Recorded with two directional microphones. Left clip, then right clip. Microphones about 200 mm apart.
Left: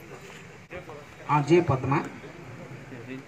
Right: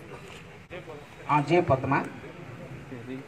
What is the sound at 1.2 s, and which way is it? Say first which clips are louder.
Speech: left 1 dB; 60° left (ahead or behind).